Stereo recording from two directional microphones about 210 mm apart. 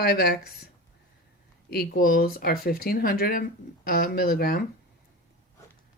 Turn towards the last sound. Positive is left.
turn(degrees=45)  # may be behind; listen again after turning